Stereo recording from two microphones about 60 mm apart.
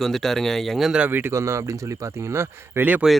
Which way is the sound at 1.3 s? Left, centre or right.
Right.